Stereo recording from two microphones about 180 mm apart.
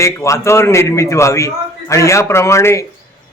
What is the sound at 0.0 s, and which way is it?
A man's voice, 15° left (ahead or behind).